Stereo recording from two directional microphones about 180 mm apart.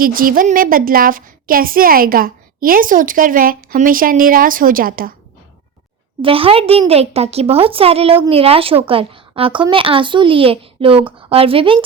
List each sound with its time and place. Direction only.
0.0 s a woman's voice: 50° right (ahead or behind)
6.2 s a woman's voice: 30° right (ahead or behind)